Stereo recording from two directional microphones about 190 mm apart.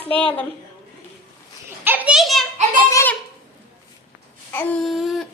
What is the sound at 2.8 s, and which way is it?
Speech, 15° left (ahead or behind).